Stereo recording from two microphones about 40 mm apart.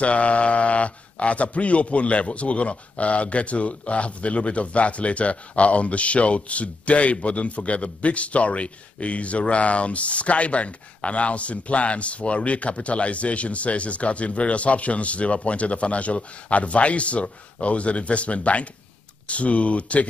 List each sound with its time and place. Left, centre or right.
0.0 s speech: left